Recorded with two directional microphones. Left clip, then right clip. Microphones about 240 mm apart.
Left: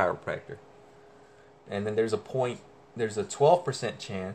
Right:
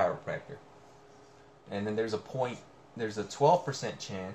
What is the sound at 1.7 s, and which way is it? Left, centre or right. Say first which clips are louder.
Speech: left 5 dB; left.